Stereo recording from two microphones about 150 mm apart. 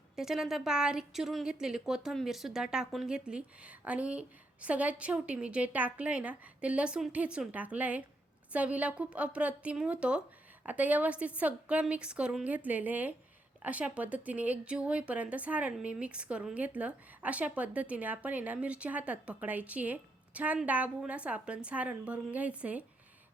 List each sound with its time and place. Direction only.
0.2 s speech: 5° right (ahead or behind)